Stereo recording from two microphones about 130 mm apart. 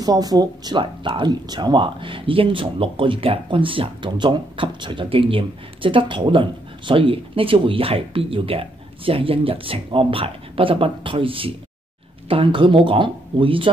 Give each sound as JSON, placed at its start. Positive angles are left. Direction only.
{"t": 0.0, "sound": "speech", "side_deg": -30}